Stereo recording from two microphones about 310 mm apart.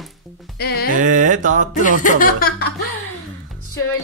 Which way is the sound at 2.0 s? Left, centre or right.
Left.